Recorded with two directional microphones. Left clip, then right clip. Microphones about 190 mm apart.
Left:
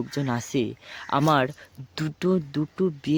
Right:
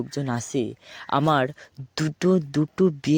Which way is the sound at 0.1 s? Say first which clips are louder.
Even; 30° right (ahead or behind).